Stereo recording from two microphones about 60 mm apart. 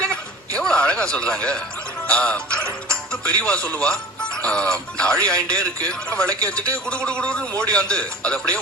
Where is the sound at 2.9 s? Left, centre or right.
Centre.